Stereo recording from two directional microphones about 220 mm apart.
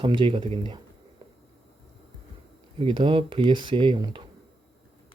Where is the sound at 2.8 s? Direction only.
20° right (ahead or behind).